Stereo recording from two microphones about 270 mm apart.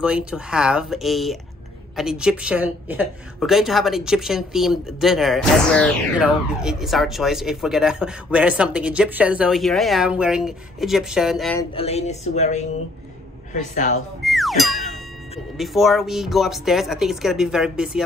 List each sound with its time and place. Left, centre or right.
0.0 s a woman's voice: centre
11.7 s speech: left
14.2 s music: centre
15.5 s a woman's voice: centre